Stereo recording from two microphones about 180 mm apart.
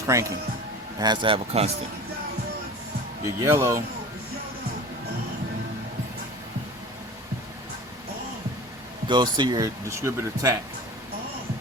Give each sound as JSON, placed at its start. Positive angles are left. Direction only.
{"t": 0.1, "sound": "speech", "side_deg": -15}
{"t": 3.2, "sound": "speech", "side_deg": -15}
{"t": 9.0, "sound": "speech", "side_deg": -25}